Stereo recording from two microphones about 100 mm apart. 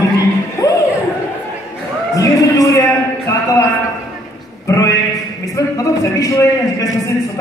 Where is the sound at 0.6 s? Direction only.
35° left (ahead or behind).